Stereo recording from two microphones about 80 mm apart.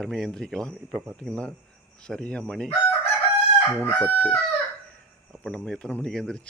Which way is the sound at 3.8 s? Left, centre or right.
Centre.